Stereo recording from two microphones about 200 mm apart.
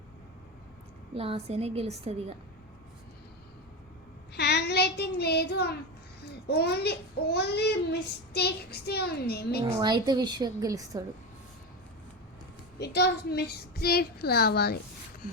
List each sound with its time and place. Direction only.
1.1 s a woman's voice: 30° right (ahead or behind)
4.4 s child singing: 55° left (ahead or behind)
6.5 s a child's voice: 55° left (ahead or behind)
9.6 s a woman's voice: 20° right (ahead or behind)
12.8 s a child's voice: 55° left (ahead or behind)